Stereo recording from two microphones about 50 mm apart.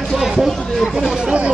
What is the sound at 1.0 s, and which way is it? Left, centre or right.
Speech, centre.